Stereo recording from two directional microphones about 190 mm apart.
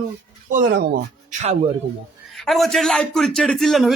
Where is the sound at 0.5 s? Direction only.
55° right (ahead or behind).